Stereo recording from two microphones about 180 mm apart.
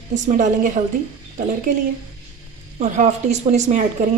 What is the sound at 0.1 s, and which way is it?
Speech, 45° right (ahead or behind).